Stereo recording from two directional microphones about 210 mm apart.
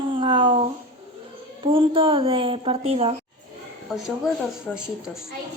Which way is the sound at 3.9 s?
Centre (ahead or behind).